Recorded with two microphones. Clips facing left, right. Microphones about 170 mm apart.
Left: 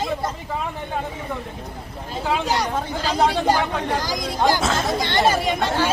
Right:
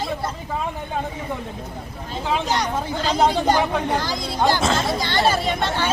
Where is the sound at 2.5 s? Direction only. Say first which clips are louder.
Even; 10° left (ahead or behind).